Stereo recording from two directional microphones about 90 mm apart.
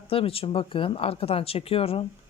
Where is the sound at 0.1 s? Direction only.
90° left.